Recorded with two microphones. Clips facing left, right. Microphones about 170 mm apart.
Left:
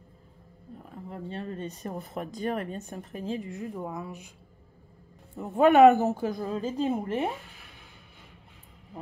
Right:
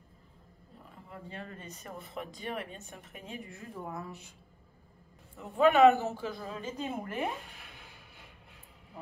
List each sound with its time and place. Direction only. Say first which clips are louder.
1.0 s speech: left 8 dB; 35° left (ahead or behind)
3.5 s speech: left 6 dB; 20° left (ahead or behind)
5.4 s a man's voice: left 5 dB; 45° left (ahead or behind)